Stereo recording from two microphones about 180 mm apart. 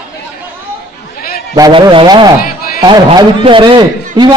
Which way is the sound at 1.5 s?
20° right (ahead or behind).